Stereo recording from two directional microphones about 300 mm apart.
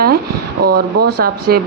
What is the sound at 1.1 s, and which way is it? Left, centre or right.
Speech, right.